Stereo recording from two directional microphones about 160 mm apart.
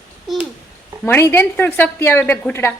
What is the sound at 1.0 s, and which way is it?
A woman's voice, 10° left (ahead or behind).